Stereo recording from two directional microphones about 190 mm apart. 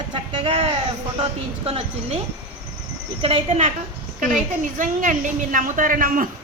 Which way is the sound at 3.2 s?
30° right (ahead or behind).